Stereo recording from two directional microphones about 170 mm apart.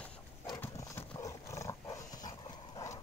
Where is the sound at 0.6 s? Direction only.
15° left (ahead or behind).